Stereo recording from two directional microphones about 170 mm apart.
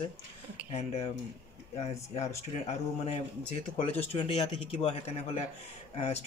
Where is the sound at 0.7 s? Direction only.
40° left (ahead or behind).